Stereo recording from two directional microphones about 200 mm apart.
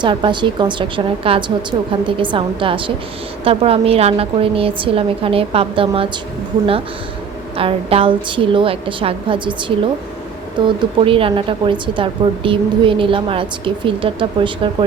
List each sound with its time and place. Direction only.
0.0 s a woman's voice: 25° right (ahead or behind)
7.5 s a woman's voice: 30° right (ahead or behind)